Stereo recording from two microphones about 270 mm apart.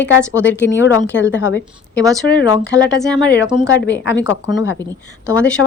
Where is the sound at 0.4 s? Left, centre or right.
Left.